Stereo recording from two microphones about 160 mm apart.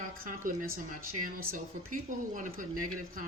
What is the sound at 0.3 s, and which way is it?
Speech, 60° right (ahead or behind).